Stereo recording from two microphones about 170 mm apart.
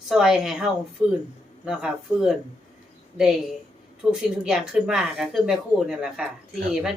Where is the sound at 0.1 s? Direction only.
Centre (ahead or behind).